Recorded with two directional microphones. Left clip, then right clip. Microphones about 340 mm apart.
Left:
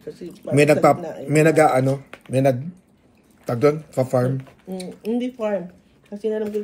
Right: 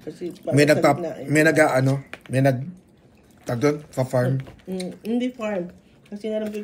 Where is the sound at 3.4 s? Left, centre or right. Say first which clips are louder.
Left 4 dB; centre.